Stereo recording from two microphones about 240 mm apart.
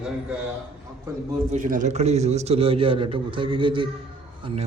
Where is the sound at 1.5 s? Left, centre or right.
Right.